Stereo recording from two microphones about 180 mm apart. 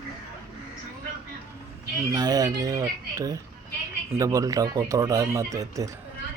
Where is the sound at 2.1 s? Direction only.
20° right (ahead or behind).